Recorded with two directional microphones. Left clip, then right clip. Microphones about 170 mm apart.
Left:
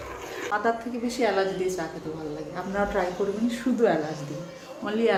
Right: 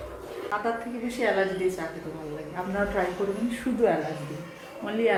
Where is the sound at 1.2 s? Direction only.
20° left (ahead or behind).